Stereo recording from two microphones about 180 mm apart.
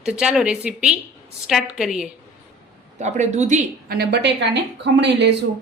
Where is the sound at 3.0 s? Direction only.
40° right (ahead or behind); by 5.4 s 75° right (ahead or behind).